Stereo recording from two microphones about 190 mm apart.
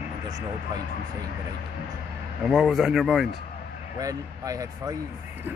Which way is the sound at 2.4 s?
Centre (ahead or behind).